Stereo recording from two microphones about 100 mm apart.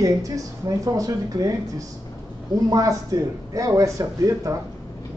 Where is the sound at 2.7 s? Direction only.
35° right (ahead or behind).